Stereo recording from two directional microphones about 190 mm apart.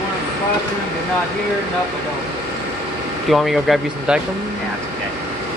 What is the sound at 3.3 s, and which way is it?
Speech, centre (ahead or behind).